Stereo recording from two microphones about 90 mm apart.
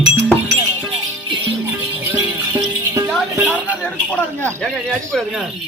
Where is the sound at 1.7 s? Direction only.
30° right (ahead or behind).